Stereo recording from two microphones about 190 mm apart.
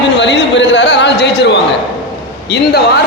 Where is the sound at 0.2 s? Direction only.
70° left (ahead or behind).